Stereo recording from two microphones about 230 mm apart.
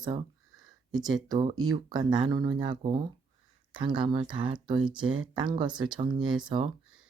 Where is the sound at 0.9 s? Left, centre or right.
Centre.